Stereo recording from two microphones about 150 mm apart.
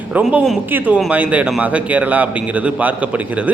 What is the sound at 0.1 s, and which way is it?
Speech, 10° right (ahead or behind).